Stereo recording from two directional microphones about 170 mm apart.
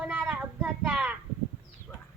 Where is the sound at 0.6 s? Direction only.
10° right (ahead or behind).